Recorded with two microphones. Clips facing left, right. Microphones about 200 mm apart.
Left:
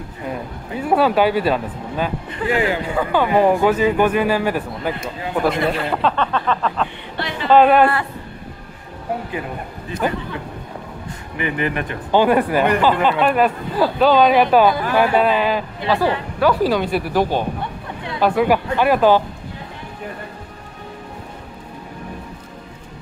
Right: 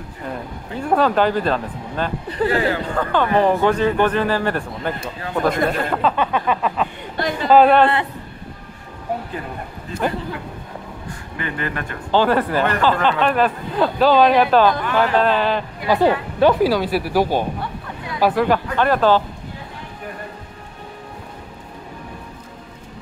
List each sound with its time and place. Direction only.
0.3 s speech: 5° left (ahead or behind)
5.5 s a man's voice: 45° right (ahead or behind)
6.0 s a sound: 10° right (ahead or behind)
7.2 s a man's voice: 45° right (ahead or behind)
7.4 s a man's voice: centre (ahead or behind)
7.8 s speech: 20° right (ahead or behind)
11.3 s speech: 15° left (ahead or behind)
15.9 s speech: 25° right (ahead or behind)
16.6 s a sound: 5° right (ahead or behind)
18.4 s speech: 10° left (ahead or behind)